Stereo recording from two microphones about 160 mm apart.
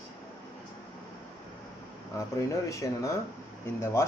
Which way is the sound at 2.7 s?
20° left (ahead or behind).